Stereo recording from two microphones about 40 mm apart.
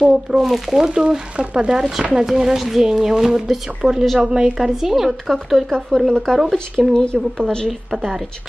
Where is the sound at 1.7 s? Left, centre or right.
Centre.